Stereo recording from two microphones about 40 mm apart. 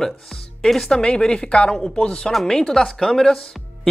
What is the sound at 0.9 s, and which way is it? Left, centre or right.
A woman's voice, left.